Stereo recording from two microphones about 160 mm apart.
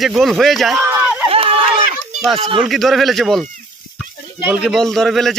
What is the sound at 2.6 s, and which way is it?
Speech, centre (ahead or behind).